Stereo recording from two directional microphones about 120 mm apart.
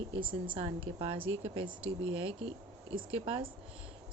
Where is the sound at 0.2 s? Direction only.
45° right (ahead or behind).